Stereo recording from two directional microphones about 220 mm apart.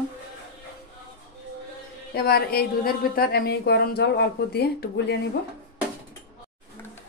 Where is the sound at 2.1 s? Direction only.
45° left (ahead or behind).